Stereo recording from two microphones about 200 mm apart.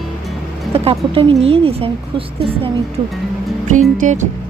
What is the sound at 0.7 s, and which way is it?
Speech, 30° right (ahead or behind).